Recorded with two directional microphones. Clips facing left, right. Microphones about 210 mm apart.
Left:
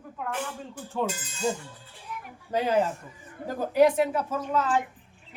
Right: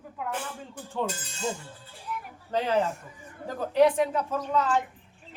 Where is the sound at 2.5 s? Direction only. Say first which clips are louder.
Left 1 dB; 10° left (ahead or behind).